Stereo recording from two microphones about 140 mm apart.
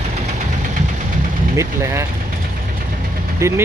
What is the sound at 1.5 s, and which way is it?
Speech, 20° right (ahead or behind).